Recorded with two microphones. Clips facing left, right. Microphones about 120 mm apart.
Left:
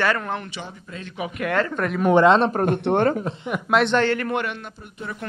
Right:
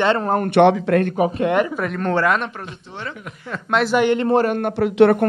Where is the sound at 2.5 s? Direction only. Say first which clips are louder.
Left 15 dB; 55° left (ahead or behind).